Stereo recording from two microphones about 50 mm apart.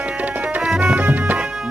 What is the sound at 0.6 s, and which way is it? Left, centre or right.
Music, centre.